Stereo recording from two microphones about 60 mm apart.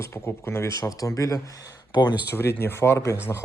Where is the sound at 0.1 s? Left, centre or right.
Left.